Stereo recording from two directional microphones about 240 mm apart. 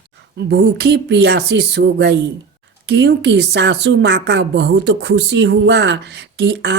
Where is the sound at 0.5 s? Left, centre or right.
Right.